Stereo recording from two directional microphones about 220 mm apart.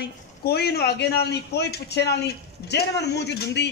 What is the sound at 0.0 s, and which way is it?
A man's voice, 45° left (ahead or behind).